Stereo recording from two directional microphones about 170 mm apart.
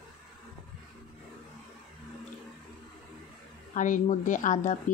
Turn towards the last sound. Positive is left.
turn(degrees=45)  # may be behind; listen again after turning